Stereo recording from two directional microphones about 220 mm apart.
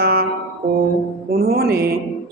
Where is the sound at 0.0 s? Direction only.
45° right (ahead or behind).